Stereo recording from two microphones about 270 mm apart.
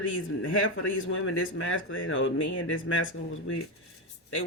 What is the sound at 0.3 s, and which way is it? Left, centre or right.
Speech, left.